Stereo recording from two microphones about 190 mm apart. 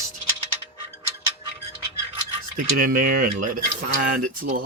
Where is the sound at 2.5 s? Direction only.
45° right (ahead or behind).